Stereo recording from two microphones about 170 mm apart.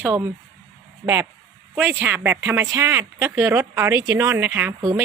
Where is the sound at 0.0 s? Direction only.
15° right (ahead or behind).